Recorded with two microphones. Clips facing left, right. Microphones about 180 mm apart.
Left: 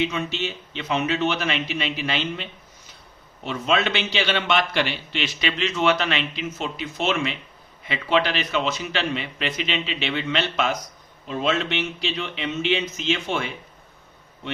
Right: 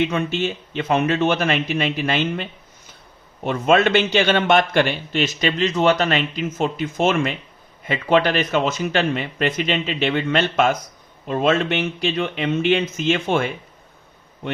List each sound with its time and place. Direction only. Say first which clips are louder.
0.0 s a man's voice: right 5 dB; 55° right (ahead or behind)